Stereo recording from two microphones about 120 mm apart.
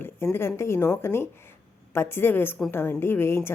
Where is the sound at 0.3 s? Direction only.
20° left (ahead or behind).